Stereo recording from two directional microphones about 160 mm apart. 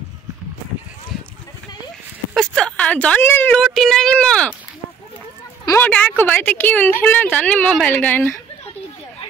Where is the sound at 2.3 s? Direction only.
5° left (ahead or behind).